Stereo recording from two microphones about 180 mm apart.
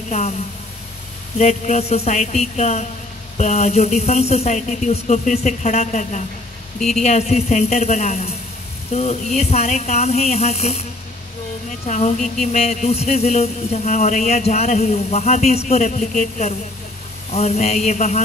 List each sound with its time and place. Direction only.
1.4 s speech: 35° left (ahead or behind)